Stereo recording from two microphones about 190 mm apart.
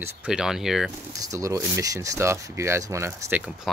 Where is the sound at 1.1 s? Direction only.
15° right (ahead or behind).